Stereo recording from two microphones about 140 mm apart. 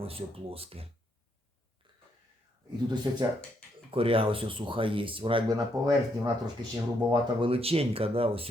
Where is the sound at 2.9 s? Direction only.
30° right (ahead or behind).